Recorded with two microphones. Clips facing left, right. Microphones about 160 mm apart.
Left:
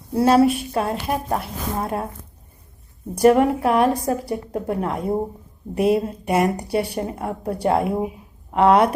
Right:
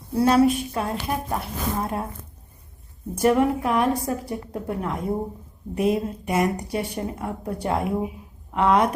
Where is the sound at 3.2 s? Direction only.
20° left (ahead or behind).